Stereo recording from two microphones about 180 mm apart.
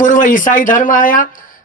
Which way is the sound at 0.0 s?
45° left (ahead or behind).